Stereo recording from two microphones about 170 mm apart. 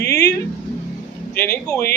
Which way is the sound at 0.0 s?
75° left (ahead or behind).